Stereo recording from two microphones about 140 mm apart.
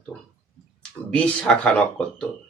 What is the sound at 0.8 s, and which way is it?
Speech, 10° left (ahead or behind).